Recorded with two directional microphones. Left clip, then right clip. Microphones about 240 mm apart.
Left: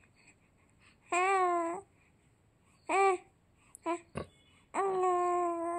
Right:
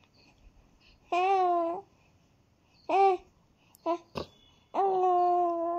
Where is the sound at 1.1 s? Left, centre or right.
Centre.